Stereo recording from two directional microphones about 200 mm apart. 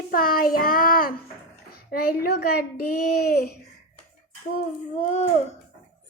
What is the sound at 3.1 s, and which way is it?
Child singing, 50° left (ahead or behind).